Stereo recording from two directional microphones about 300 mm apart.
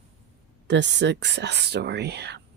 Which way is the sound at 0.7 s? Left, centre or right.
Right.